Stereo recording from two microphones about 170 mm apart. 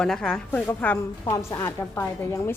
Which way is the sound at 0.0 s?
5° left (ahead or behind).